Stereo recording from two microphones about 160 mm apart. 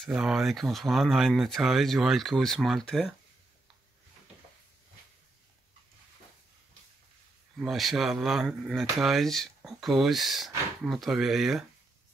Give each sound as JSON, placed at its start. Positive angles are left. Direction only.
{"t": 0.0, "sound": "speech", "side_deg": -5}
{"t": 7.5, "sound": "speech", "side_deg": 0}